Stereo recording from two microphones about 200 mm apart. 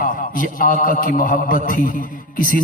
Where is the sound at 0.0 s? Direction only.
40° left (ahead or behind).